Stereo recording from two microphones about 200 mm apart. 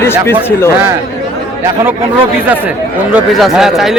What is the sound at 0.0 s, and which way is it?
Speech, 10° left (ahead or behind).